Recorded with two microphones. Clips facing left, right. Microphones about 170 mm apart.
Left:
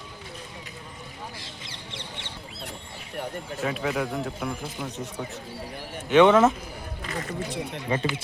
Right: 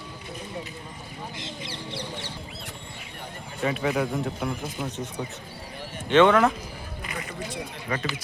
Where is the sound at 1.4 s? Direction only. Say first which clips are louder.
Right 6 dB; 30° right (ahead or behind).